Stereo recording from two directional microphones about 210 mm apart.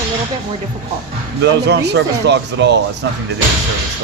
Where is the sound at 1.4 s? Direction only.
55° right (ahead or behind).